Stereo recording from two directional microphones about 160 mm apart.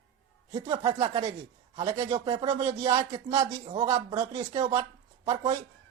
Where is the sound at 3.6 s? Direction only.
35° right (ahead or behind).